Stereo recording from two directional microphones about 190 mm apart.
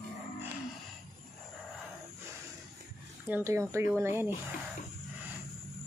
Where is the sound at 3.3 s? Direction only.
15° right (ahead or behind).